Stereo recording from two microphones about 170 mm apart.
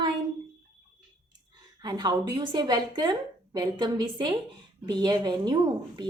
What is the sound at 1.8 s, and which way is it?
Speech, 25° right (ahead or behind).